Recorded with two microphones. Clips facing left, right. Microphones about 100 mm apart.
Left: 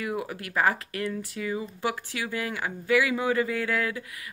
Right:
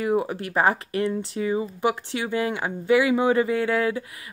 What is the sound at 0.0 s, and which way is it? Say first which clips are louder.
Speech: right 8 dB; 30° right (ahead or behind).